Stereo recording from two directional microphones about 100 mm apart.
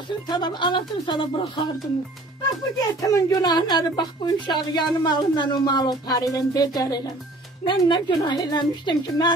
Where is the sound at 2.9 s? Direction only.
35° left (ahead or behind).